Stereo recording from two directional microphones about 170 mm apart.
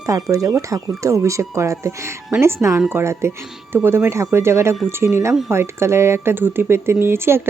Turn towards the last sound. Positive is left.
turn(degrees=-15)  # may be behind; listen again after turning